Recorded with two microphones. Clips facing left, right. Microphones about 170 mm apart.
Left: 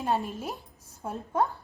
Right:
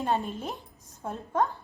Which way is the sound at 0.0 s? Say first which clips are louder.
Even; centre (ahead or behind).